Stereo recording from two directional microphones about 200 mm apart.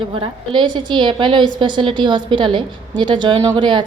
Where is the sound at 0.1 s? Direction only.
25° right (ahead or behind).